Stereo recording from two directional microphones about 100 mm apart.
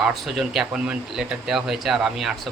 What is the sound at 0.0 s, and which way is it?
Speech, centre (ahead or behind).